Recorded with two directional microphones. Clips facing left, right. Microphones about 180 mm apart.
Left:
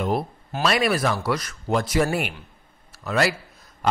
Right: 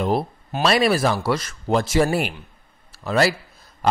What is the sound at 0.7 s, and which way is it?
A man's voice, 30° right (ahead or behind).